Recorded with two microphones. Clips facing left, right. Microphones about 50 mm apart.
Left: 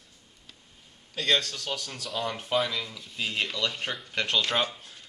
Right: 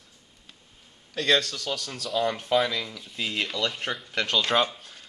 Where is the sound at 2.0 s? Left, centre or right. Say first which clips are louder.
Right 6 dB; centre.